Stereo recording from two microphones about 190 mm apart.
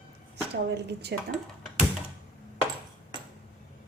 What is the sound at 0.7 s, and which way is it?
Speech, 60° right (ahead or behind).